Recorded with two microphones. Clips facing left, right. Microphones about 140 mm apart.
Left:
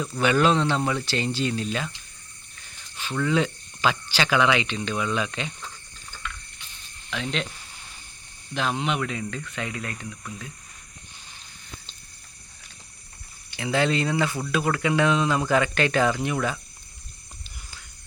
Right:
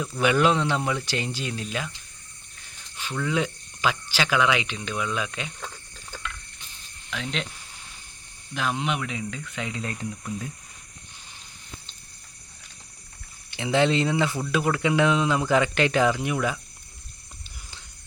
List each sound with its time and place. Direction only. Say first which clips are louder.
0.2 s speech: left 1 dB; 10° right (ahead or behind)
3.0 s speech: left 3 dB; 5° right (ahead or behind)
7.1 s speech: left 2 dB; 5° right (ahead or behind)
8.5 s speech: left 1 dB; 5° right (ahead or behind); by 10.5 s 30° right (ahead or behind)
13.6 s speech: right 2 dB; 20° right (ahead or behind)
14.3 s speech: right 1 dB; centre (ahead or behind)
14.5 s speech: even; 20° right (ahead or behind)